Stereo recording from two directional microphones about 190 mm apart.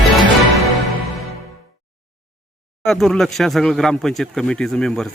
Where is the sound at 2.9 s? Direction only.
Centre (ahead or behind).